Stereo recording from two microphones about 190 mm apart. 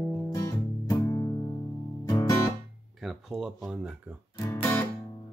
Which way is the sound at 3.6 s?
5° right (ahead or behind).